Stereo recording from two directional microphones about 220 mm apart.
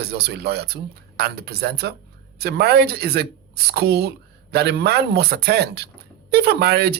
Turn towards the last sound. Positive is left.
turn(degrees=-45)  # may be behind; listen again after turning